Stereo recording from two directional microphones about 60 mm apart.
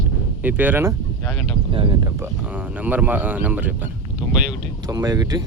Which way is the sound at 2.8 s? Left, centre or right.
Right.